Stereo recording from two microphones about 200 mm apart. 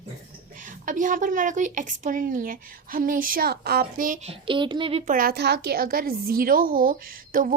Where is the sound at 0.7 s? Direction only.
40° right (ahead or behind).